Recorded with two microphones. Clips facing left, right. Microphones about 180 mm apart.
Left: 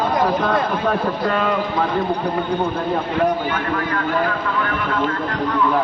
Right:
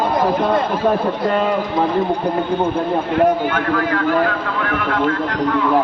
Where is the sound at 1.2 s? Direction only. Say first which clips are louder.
Right 3 dB; 30° right (ahead or behind).